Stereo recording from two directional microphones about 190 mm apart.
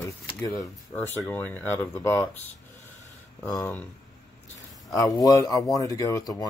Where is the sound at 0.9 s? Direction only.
10° left (ahead or behind).